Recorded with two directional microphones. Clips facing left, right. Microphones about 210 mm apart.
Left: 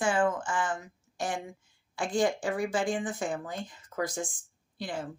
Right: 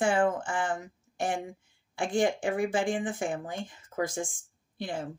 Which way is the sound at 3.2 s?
30° right (ahead or behind).